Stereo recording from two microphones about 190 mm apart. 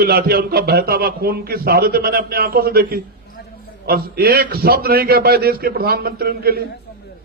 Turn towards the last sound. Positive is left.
turn(degrees=-55)  # may be behind; listen again after turning